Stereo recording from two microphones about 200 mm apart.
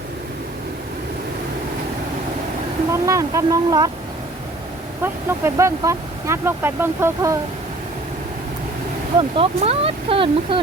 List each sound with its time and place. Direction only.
2.9 s speech: 15° right (ahead or behind)
5.0 s speech: 15° right (ahead or behind)
9.4 s speech: 30° right (ahead or behind)